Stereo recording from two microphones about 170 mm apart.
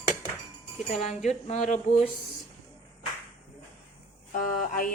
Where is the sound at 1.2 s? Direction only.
45° left (ahead or behind).